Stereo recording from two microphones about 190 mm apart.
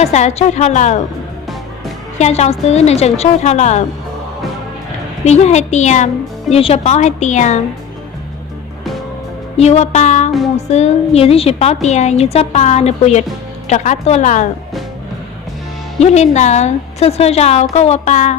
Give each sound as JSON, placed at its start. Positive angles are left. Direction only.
{"t": 0.0, "sound": "a woman's voice", "side_deg": 35}
{"t": 2.1, "sound": "a woman's voice", "side_deg": 35}
{"t": 5.2, "sound": "a woman's voice", "side_deg": 35}
{"t": 9.6, "sound": "a woman's voice", "side_deg": 35}
{"t": 16.0, "sound": "a woman's voice", "side_deg": 35}